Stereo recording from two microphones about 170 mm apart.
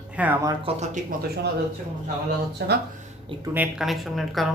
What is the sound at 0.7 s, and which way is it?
Speech, 35° right (ahead or behind).